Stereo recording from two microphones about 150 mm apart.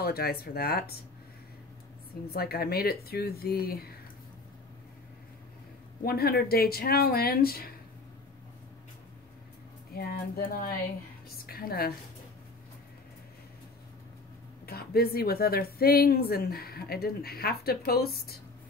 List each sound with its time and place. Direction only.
0.0 s speech: 90° left
2.2 s speech: 90° left
6.0 s speech: 90° left
9.9 s a woman's voice: 80° left
14.7 s speech: 90° left